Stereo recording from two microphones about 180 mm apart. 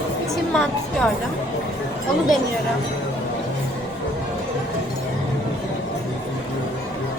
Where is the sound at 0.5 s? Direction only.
5° left (ahead or behind).